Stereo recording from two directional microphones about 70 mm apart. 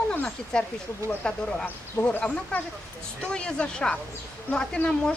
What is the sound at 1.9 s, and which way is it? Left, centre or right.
Speech, left.